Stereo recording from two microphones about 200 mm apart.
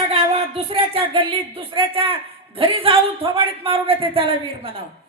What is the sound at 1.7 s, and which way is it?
Speech, 25° right (ahead or behind).